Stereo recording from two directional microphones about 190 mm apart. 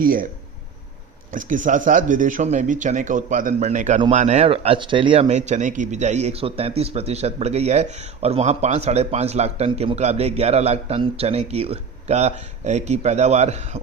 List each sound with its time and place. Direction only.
0.0 s speech: 50° right (ahead or behind)
1.3 s speech: 45° right (ahead or behind)